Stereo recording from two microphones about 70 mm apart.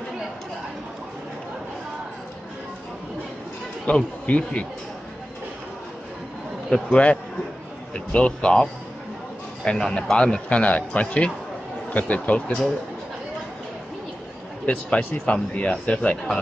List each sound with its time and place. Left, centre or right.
3.8 s a man's voice: centre
6.7 s a man's voice: centre
9.7 s a man's voice: centre
14.7 s speech: centre